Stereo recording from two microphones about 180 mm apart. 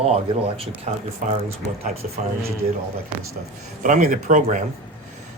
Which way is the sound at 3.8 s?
45° right (ahead or behind).